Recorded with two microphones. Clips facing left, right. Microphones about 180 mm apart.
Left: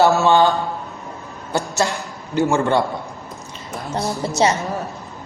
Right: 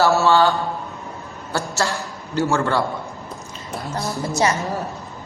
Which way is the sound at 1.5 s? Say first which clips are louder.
Left 2 dB; 20° left (ahead or behind).